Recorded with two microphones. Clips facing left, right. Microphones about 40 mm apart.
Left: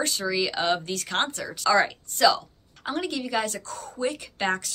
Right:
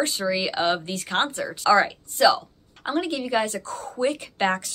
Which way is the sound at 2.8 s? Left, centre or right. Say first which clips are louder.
Right 3 dB; centre.